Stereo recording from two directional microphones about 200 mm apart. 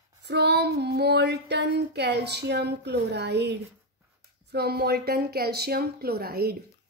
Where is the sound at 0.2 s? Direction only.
55° right (ahead or behind).